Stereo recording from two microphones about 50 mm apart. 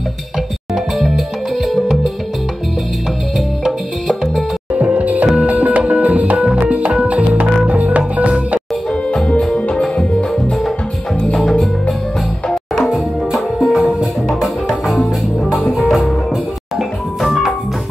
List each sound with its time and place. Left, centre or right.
0.9 s music: centre
3.3 s music: centre
4.7 s music: right
9.3 s music: centre
12.4 s music: centre
17.2 s music: centre